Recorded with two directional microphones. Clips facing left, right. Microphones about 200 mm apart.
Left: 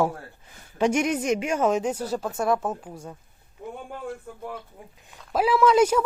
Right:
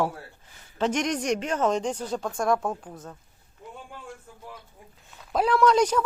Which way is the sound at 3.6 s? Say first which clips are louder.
Left 7 dB; 50° left (ahead or behind).